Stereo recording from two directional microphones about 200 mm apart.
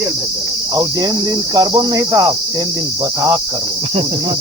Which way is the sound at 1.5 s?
20° right (ahead or behind).